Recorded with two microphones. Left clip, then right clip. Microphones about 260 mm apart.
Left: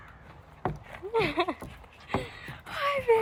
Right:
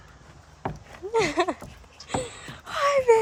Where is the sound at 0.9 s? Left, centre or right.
Centre.